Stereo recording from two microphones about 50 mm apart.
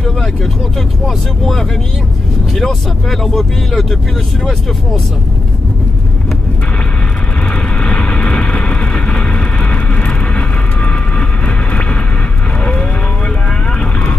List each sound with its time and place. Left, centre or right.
1.0 s speech: centre
7.8 s vehicle: centre